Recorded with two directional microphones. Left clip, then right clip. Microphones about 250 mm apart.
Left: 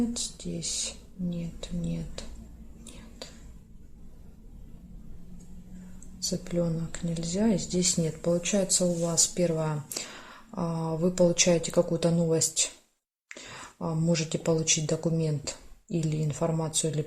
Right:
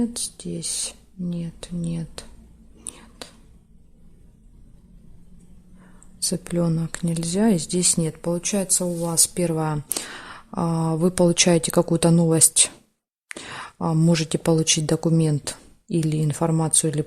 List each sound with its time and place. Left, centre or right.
0.1 s speech: right
3.2 s a sound: right
6.1 s speech: right